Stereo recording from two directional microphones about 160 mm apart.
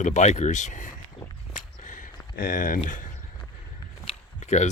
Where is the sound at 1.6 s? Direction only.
55° left (ahead or behind).